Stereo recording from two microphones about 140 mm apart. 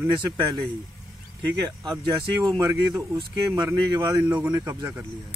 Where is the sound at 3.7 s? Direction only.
20° right (ahead or behind).